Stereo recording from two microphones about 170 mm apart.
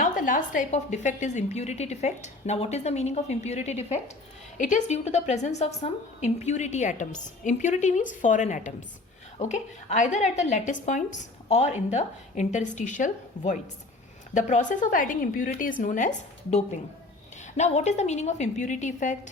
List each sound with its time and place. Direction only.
0.0 s a woman's voice: 50° left (ahead or behind)